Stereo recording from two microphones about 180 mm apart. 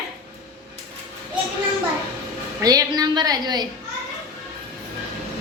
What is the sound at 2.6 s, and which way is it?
A woman's voice, 20° right (ahead or behind).